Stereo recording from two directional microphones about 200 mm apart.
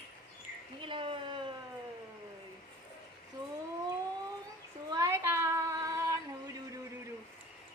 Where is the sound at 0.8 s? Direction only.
25° right (ahead or behind).